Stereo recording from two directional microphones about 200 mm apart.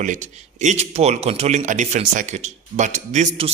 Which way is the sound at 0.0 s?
40° right (ahead or behind).